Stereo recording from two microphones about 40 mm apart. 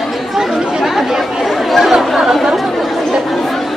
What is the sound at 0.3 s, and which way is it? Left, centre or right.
Chatter, centre.